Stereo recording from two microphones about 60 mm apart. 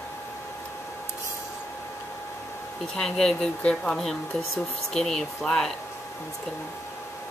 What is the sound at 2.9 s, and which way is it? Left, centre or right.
Speech, centre.